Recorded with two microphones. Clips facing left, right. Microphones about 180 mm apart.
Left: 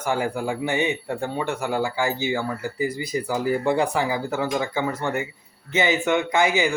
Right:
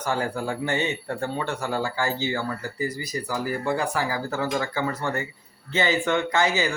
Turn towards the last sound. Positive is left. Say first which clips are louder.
# left 3 dB
turn(degrees=10)  # may be behind; listen again after turning